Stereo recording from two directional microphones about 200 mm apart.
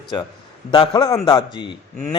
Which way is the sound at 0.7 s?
25° left (ahead or behind).